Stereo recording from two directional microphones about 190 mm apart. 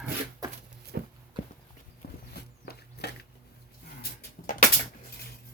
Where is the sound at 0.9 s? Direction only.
55° right (ahead or behind).